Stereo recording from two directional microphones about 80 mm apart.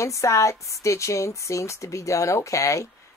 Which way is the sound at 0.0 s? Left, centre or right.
Left.